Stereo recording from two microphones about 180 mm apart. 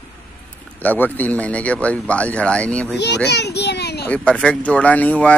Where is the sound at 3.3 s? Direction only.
70° left (ahead or behind).